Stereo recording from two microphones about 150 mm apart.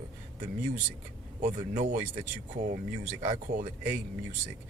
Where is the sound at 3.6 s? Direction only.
70° right (ahead or behind).